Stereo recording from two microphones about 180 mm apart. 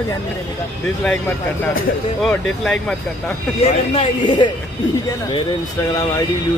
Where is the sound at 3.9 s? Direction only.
25° left (ahead or behind).